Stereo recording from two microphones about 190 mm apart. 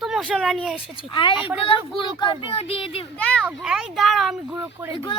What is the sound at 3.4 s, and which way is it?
Speech, 5° right (ahead or behind).